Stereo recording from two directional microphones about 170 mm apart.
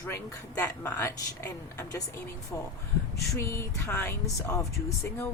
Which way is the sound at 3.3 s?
15° left (ahead or behind).